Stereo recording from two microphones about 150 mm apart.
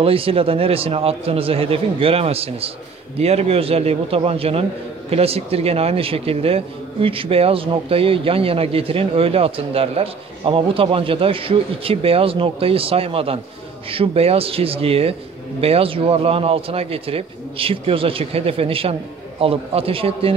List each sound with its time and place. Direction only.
0.0 s a man's voice: 40° right (ahead or behind)